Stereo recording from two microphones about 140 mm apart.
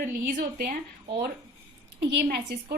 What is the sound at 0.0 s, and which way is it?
Speech, 90° right.